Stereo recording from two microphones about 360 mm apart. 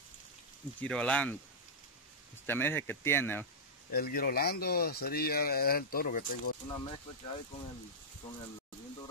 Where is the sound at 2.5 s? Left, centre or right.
Centre.